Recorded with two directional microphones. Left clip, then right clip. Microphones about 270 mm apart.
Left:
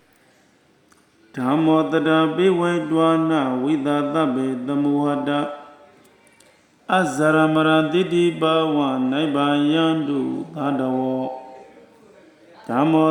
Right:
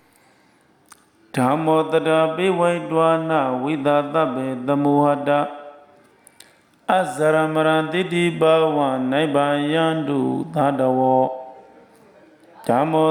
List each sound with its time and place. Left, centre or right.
1.3 s mantra: right
6.8 s mantra: right
12.6 s mantra: right